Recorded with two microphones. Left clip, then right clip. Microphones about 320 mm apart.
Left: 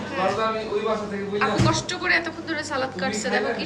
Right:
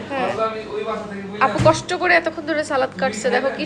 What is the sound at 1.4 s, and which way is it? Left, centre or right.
A woman's voice, centre.